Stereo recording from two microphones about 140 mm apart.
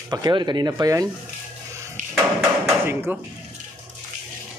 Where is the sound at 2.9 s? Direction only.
15° right (ahead or behind).